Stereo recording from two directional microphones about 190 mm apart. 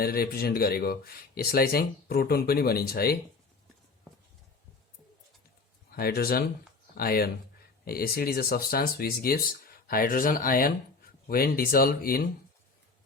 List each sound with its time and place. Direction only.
0.0 s speech: 50° left (ahead or behind)
5.9 s speech: 50° left (ahead or behind)